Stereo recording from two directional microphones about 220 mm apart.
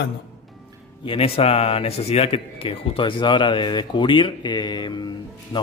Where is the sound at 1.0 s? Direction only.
25° left (ahead or behind).